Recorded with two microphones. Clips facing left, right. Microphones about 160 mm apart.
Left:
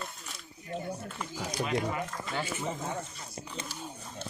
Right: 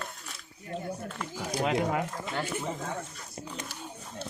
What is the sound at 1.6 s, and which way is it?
Speech, 70° right (ahead or behind).